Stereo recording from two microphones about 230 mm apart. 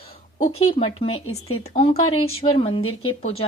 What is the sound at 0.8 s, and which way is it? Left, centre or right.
Speech, left.